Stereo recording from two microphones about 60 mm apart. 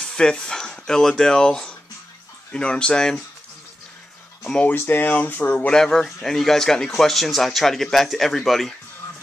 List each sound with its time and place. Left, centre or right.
0.0 s speech: centre
4.6 s speech: left
5.7 s speech: centre